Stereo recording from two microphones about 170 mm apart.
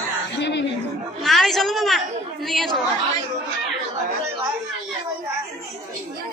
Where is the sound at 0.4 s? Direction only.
90° left.